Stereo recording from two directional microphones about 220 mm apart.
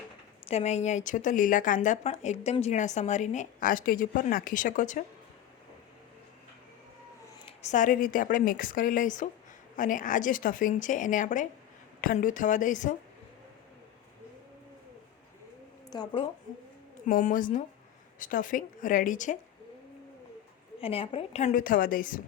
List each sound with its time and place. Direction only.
0.4 s a woman's voice: 30° left (ahead or behind)
7.4 s a woman's voice: 30° left (ahead or behind)
15.9 s speech: 20° left (ahead or behind)
17.1 s a woman's voice: 35° left (ahead or behind)
20.8 s a woman's voice: 25° left (ahead or behind)